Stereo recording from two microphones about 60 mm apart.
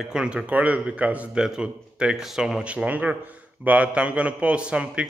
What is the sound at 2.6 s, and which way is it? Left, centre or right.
A man's voice, right.